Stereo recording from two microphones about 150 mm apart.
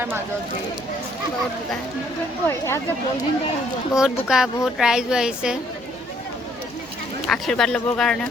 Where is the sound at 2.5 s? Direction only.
20° left (ahead or behind).